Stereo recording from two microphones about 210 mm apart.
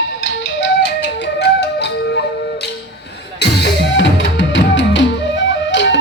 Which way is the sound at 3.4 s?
55° left (ahead or behind).